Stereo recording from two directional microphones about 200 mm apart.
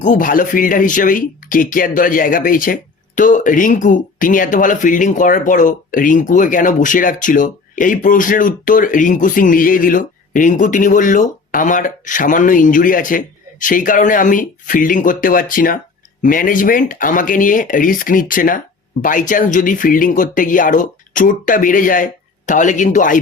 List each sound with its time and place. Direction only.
0.0 s speech: 40° left (ahead or behind)